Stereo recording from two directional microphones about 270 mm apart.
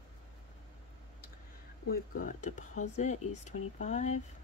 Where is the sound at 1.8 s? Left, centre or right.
Left.